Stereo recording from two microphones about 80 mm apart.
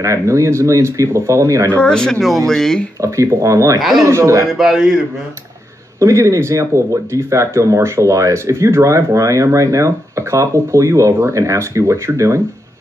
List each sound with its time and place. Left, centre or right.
0.0 s speech: right
1.8 s speech: centre
3.0 s a man's voice: right
4.5 s a man's voice: centre
5.9 s speech: right